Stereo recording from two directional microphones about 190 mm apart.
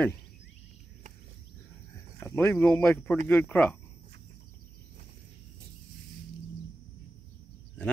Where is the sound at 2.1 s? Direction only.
10° left (ahead or behind).